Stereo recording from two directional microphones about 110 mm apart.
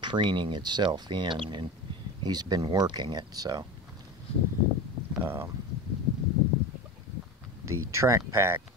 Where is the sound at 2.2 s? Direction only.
40° right (ahead or behind).